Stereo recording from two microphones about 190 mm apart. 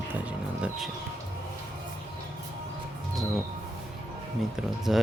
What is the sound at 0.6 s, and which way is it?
Speech, 5° right (ahead or behind).